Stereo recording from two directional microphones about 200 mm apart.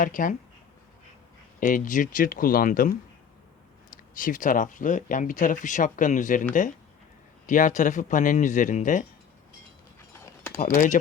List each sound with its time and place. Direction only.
0.0 s speech: 40° left (ahead or behind)
1.5 s speech: 45° left (ahead or behind)
4.2 s speech: 40° left (ahead or behind)
10.6 s speech: 40° left (ahead or behind)